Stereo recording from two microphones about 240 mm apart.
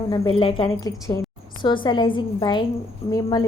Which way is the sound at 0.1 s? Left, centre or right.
Left.